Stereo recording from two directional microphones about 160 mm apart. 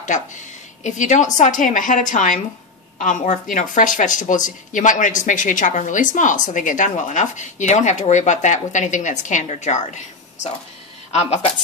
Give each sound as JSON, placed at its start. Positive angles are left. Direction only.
{"t": 0.8, "sound": "a woman's voice", "side_deg": 50}